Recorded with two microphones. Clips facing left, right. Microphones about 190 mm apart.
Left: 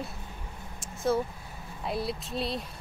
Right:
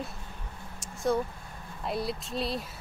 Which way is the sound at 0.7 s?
Centre (ahead or behind).